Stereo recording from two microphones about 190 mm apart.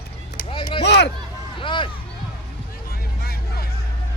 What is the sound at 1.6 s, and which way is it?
Music, 25° left (ahead or behind).